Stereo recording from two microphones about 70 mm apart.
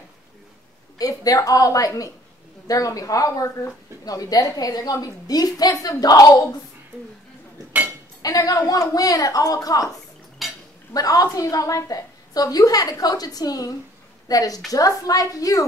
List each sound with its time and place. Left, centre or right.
0.9 s a woman's voice: left
4.0 s a woman's voice: left
8.2 s a woman's voice: left
10.4 s dishes: centre
10.9 s a woman's voice: left